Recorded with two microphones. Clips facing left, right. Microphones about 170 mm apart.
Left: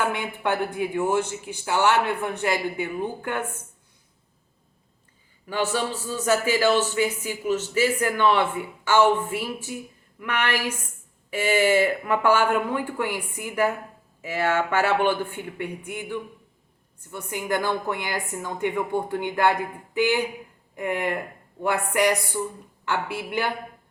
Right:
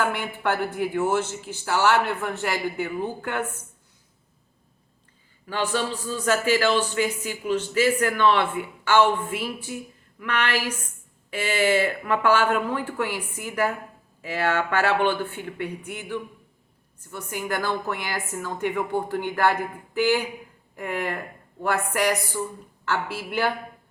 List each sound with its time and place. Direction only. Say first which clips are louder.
0.0 s speech: even; 20° left (ahead or behind)
6.1 s speech: even; 15° left (ahead or behind)